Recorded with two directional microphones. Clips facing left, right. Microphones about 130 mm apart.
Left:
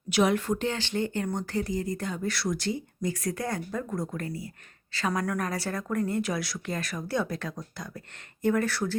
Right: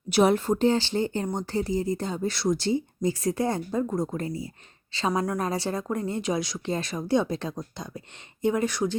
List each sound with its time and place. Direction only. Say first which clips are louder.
0.1 s speech: right 3 dB; 35° right (ahead or behind); by 9.0 s 15° right (ahead or behind)